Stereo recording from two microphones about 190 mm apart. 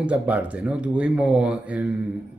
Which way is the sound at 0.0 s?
5° right (ahead or behind).